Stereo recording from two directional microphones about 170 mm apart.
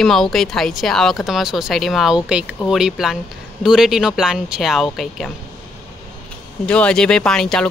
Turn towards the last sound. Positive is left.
turn(degrees=5)  # may be behind; listen again after turning